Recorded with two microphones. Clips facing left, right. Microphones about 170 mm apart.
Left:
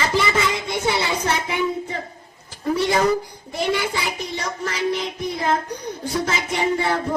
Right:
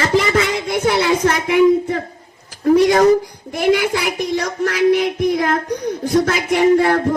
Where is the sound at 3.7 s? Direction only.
70° right (ahead or behind).